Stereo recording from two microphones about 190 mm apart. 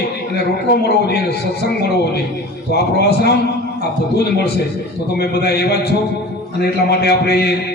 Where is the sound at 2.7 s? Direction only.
55° left (ahead or behind).